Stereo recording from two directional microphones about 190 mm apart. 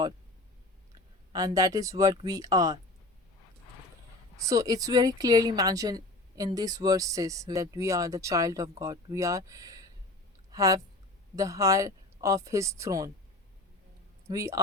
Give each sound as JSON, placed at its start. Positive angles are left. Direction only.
{"t": 1.3, "sound": "speech", "side_deg": -20}
{"t": 4.4, "sound": "speech", "side_deg": -20}
{"t": 14.3, "sound": "speech", "side_deg": -15}